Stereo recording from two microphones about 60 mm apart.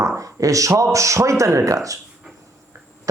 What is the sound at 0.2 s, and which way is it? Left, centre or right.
Speech, right.